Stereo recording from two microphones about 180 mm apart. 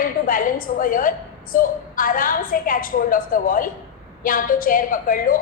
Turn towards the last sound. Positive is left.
turn(degrees=50)  # may be behind; listen again after turning